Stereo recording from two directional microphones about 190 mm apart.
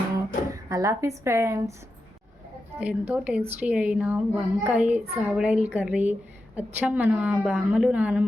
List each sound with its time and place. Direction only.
0.5 s a child's voice: 15° right (ahead or behind)
2.7 s a child's voice: 10° right (ahead or behind)